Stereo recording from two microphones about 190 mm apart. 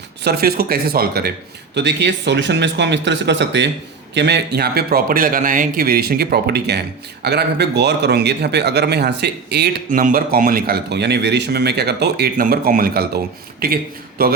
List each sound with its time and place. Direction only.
0.3 s a man's voice: 55° right (ahead or behind)
1.7 s a man's voice: 65° right (ahead or behind)